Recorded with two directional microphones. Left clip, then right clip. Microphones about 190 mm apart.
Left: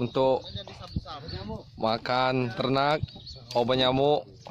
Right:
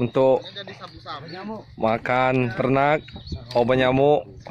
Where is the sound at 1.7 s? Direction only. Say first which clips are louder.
Right 5 dB; 10° left (ahead or behind).